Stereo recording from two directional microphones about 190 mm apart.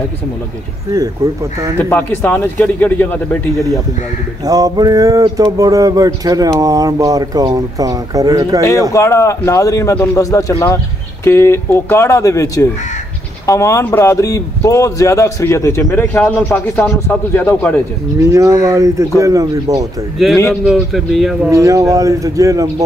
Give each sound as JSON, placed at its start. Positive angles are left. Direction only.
{"t": 0.9, "sound": "speech", "side_deg": -15}
{"t": 1.8, "sound": "a man's voice", "side_deg": 10}
{"t": 4.5, "sound": "a sound", "side_deg": -20}
{"t": 8.9, "sound": "a man's voice", "side_deg": 15}
{"t": 18.2, "sound": "speech", "side_deg": -15}
{"t": 20.2, "sound": "a man's voice", "side_deg": 0}
{"t": 21.5, "sound": "speech", "side_deg": -15}